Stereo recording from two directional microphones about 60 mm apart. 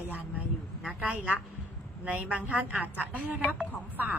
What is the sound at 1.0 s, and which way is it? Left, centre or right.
A woman's voice, right.